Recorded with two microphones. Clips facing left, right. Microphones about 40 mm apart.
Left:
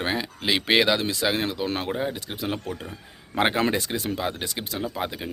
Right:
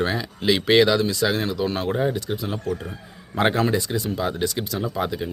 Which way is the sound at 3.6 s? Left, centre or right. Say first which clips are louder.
Right 2 dB; left.